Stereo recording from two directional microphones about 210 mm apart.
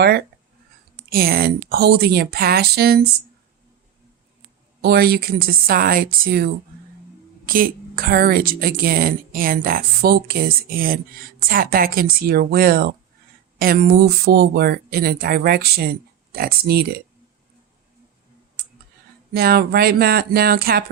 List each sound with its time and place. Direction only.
1.1 s speech: 45° right (ahead or behind)
4.8 s speech: 50° right (ahead or behind)
19.3 s speech: 50° right (ahead or behind)